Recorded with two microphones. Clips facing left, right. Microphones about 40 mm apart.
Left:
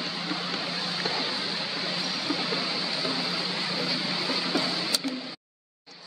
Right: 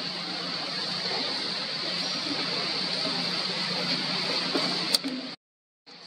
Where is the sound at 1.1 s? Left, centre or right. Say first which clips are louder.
Left 2 dB; centre.